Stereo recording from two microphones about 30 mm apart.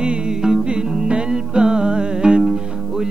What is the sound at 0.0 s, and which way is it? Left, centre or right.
Music, right.